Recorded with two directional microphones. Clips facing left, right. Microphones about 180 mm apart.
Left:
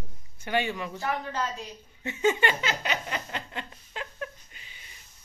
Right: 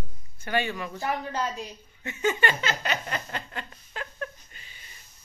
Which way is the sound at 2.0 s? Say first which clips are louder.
Left 1 dB; 25° left (ahead or behind).